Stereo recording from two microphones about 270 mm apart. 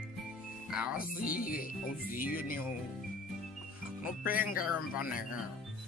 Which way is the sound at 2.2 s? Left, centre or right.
Left.